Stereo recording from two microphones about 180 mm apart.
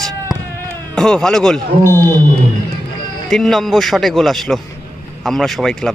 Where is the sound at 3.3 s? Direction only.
Centre (ahead or behind).